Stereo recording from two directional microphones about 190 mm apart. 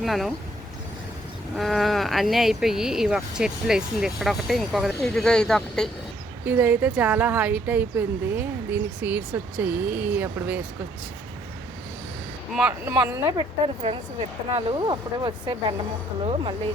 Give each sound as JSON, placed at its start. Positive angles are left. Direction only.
{"t": 0.0, "sound": "speech", "side_deg": 0}
{"t": 1.5, "sound": "speech", "side_deg": 0}
{"t": 6.4, "sound": "a woman's voice", "side_deg": -10}
{"t": 12.5, "sound": "a woman's voice", "side_deg": -10}
{"t": 13.8, "sound": "speech", "side_deg": -30}